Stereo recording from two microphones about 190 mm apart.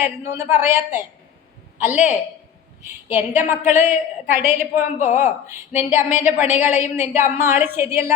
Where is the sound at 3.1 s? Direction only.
10° right (ahead or behind).